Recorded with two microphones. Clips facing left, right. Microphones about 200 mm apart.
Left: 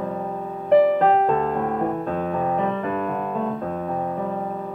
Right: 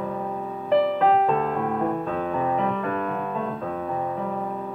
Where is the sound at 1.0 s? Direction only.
40° left (ahead or behind).